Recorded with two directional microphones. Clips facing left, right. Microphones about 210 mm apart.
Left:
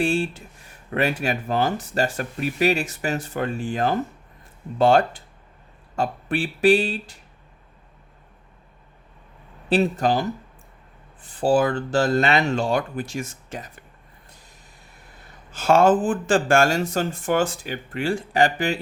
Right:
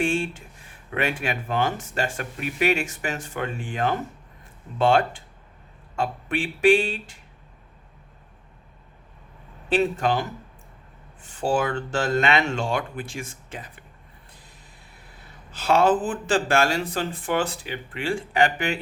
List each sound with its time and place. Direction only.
0.0 s speech: 35° left (ahead or behind)
9.6 s speech: 35° left (ahead or behind)
15.5 s speech: 45° left (ahead or behind)